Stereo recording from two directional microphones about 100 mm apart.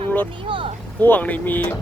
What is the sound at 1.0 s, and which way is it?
Speech, 20° left (ahead or behind).